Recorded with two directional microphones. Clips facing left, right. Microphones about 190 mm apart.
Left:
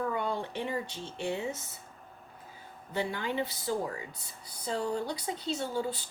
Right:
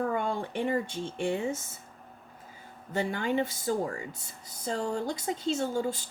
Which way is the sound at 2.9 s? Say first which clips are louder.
Right 4 dB; 45° right (ahead or behind).